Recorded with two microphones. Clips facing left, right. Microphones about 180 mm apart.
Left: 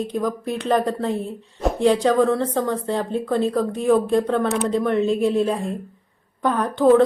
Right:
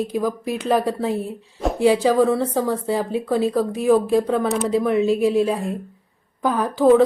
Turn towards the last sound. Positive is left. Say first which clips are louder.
# right 1 dB
turn(degrees=-5)  # may be behind; listen again after turning